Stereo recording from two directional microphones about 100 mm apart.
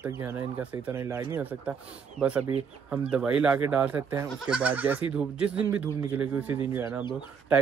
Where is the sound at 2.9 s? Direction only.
10° right (ahead or behind).